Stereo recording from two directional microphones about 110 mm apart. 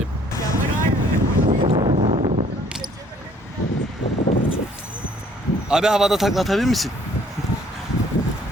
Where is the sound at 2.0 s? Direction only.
70° right (ahead or behind).